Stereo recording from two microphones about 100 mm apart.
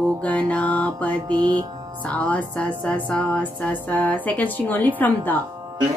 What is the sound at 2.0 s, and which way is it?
Music, 15° left (ahead or behind).